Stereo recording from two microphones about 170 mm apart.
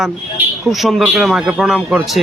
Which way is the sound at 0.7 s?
Centre (ahead or behind).